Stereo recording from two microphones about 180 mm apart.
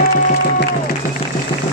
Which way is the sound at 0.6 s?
55° left (ahead or behind).